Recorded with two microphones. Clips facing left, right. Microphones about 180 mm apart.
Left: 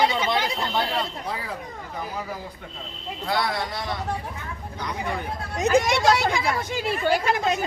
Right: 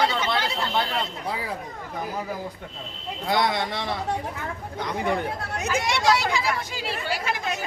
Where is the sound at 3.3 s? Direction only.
20° right (ahead or behind).